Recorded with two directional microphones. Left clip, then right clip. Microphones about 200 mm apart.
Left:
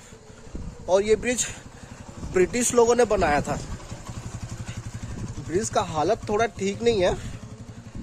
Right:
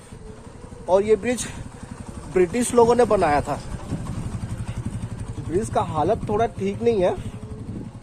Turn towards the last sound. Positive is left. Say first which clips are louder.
# right 2 dB
turn(degrees=25)  # may be behind; listen again after turning